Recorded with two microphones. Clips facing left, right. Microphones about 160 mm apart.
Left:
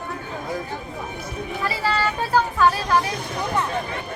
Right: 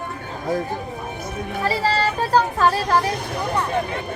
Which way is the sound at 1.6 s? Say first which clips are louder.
Right 3 dB; 35° right (ahead or behind).